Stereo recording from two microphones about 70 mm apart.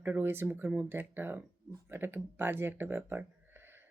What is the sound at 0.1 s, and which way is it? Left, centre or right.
Speech, right.